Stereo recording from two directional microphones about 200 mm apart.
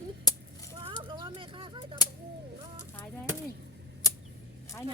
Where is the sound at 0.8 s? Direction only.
25° right (ahead or behind).